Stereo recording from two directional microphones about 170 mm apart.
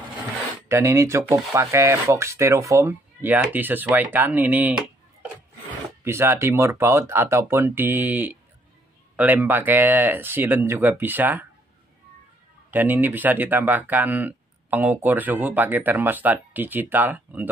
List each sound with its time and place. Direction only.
0.7 s speech: 15° right (ahead or behind)
6.0 s speech: 15° right (ahead or behind)
12.7 s speech: 10° right (ahead or behind)